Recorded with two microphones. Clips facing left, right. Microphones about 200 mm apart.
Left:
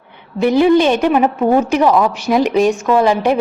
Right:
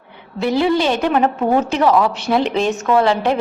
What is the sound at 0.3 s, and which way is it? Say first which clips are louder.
A woman's voice: left 5 dB; 15° left (ahead or behind).